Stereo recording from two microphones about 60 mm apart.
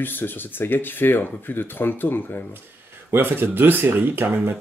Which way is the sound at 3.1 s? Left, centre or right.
Right.